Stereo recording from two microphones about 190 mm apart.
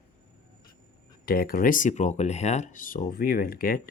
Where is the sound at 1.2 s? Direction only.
50° left (ahead or behind).